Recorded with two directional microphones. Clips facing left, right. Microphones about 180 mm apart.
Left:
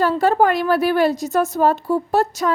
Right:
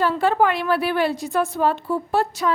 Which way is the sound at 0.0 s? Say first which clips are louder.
Left 3 dB; 40° left (ahead or behind).